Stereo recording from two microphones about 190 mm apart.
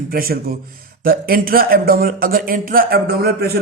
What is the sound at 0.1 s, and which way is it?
Speech, 50° right (ahead or behind).